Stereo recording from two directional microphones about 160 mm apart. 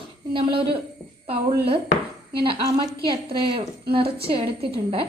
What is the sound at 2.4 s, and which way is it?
A woman's voice, 30° right (ahead or behind).